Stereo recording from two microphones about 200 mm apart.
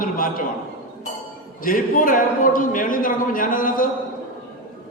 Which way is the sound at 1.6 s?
45° left (ahead or behind).